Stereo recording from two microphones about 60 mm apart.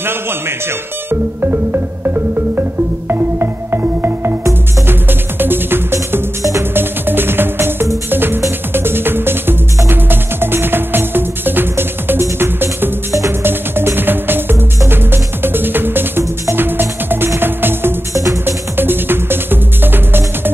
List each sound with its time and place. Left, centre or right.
0.0 s speech: right
1.4 s music: right
18.1 s music: right
18.4 s music: right